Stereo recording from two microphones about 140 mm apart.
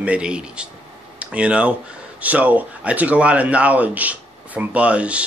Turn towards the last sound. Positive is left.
turn(degrees=-10)  # may be behind; listen again after turning